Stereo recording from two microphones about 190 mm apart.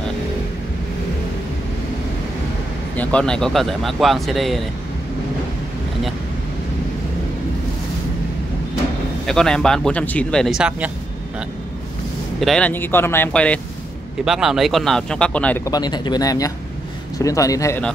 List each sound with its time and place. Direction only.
3.0 s speech: 5° left (ahead or behind)
9.2 s speech: 5° left (ahead or behind)
12.4 s a man's voice: 5° left (ahead or behind)